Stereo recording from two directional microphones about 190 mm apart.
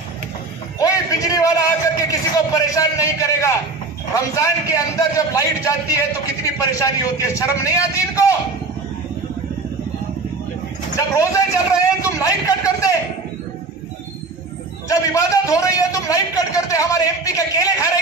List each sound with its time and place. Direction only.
0.7 s a sound: 20° left (ahead or behind)
2.0 s a man's voice: 20° left (ahead or behind)
11.0 s a man's voice: 15° left (ahead or behind)
14.9 s a man's voice: 15° left (ahead or behind)